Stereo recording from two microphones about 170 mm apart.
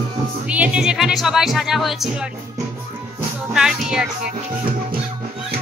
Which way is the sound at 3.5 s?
5° right (ahead or behind).